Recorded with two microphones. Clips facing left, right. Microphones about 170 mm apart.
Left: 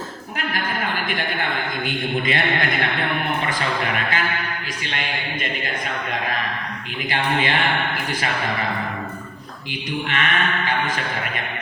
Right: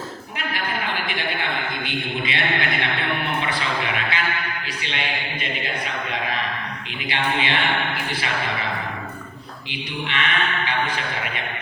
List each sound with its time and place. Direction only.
1.9 s a man's voice: 45° left (ahead or behind)
3.4 s sheep: 45° left (ahead or behind)
4.9 s a man's voice: 45° left (ahead or behind)
7.1 s a man's voice: 45° left (ahead or behind)
10.1 s a man's voice: 45° left (ahead or behind)